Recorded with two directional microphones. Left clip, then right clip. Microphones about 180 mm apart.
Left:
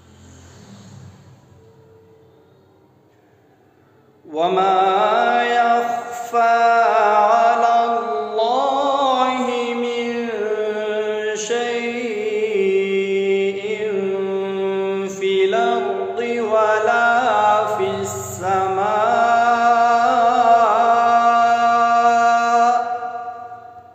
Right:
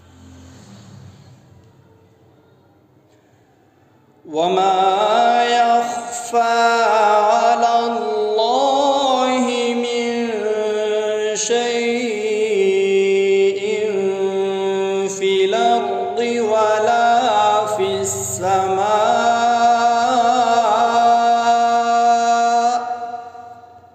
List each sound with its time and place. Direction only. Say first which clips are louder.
4.3 s mantra: right 1 dB; 40° right (ahead or behind)